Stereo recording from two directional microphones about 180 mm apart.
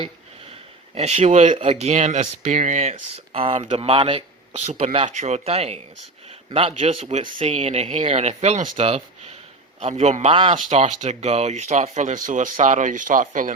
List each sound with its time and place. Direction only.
0.9 s a man's voice: 35° right (ahead or behind)